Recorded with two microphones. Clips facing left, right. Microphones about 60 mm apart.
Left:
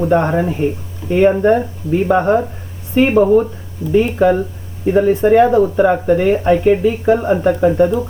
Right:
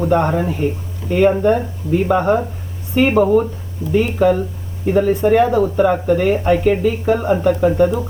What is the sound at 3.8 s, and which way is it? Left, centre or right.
Speech, right.